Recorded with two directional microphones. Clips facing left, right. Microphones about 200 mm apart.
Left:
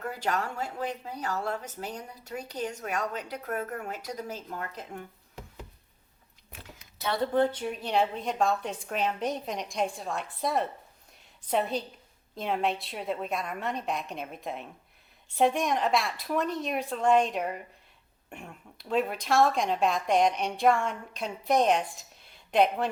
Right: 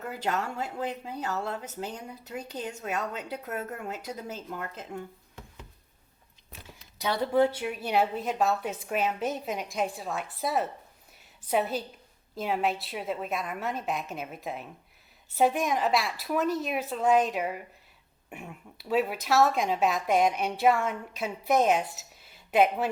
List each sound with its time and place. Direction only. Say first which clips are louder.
0.2 s a woman's voice: right 1 dB; 20° right (ahead or behind)
7.0 s speech: right 1 dB; 10° right (ahead or behind)